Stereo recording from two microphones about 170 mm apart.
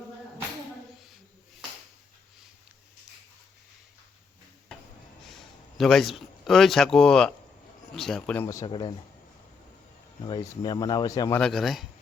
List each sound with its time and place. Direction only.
5.3 s speech: centre (ahead or behind)
8.4 s speech: 25° left (ahead or behind)
10.2 s speech: 25° left (ahead or behind)
11.3 s speech: centre (ahead or behind)